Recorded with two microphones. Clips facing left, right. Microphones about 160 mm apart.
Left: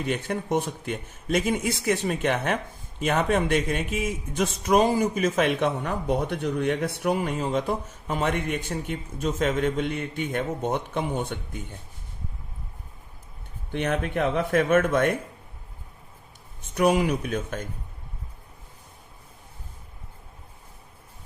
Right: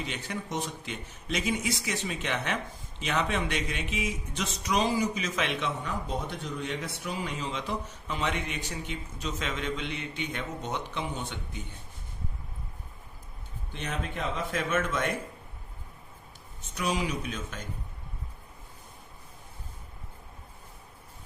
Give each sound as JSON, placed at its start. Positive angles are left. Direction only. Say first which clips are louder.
{"t": 0.0, "sound": "speech", "louder": "left 8 dB", "side_deg": 50}
{"t": 13.7, "sound": "speech", "louder": "left 9 dB", "side_deg": 60}
{"t": 16.7, "sound": "speech", "louder": "left 9 dB", "side_deg": 55}